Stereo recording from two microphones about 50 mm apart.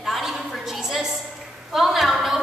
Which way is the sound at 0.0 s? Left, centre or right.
Centre.